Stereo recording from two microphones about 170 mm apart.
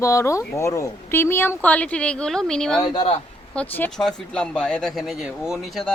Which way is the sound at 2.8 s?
25° left (ahead or behind).